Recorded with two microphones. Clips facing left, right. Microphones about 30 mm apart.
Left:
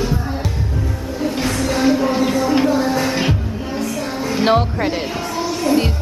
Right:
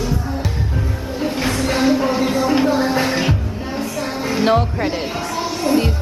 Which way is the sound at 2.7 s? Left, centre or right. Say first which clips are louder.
Even; centre.